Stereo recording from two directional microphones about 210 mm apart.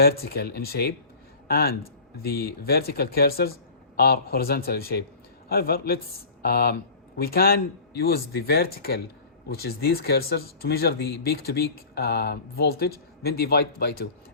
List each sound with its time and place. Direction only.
0.0 s speech: 50° left (ahead or behind)